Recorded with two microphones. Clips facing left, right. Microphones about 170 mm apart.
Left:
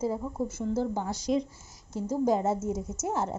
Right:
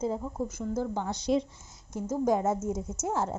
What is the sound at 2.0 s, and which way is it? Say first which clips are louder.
Speech: even; 10° left (ahead or behind).